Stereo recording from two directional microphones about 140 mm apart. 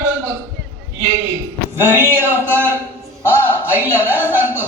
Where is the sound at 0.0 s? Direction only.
15° right (ahead or behind).